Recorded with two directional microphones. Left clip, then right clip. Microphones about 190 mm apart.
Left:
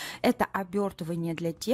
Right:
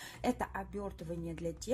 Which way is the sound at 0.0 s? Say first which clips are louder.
Left 9 dB; 55° left (ahead or behind).